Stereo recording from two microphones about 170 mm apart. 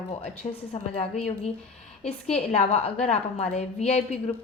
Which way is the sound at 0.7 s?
40° left (ahead or behind).